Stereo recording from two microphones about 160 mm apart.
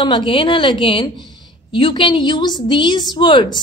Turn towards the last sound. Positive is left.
turn(degrees=30)  # may be behind; listen again after turning